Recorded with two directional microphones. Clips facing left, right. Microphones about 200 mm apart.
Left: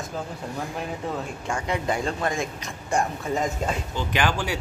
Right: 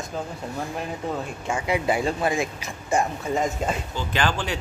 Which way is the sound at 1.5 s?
5° right (ahead or behind).